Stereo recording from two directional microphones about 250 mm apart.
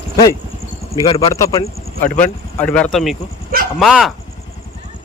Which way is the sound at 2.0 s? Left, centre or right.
Left.